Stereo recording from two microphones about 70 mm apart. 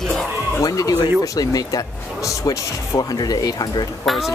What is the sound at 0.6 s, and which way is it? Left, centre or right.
Speech, left.